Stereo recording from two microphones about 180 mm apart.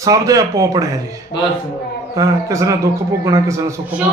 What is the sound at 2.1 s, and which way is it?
A man's voice, 20° right (ahead or behind).